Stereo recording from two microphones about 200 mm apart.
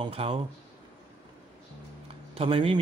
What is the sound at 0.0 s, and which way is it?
Speech, 25° right (ahead or behind).